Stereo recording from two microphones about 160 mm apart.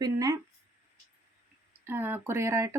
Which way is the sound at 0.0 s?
20° right (ahead or behind).